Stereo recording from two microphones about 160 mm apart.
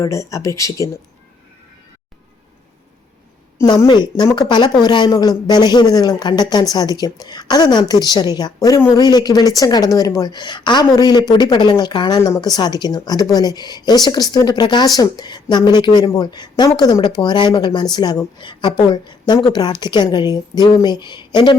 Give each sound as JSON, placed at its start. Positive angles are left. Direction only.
{"t": 0.0, "sound": "a woman's voice", "side_deg": 20}
{"t": 3.6, "sound": "a woman's voice", "side_deg": 20}